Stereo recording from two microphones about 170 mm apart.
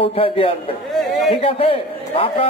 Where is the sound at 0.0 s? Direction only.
30° left (ahead or behind).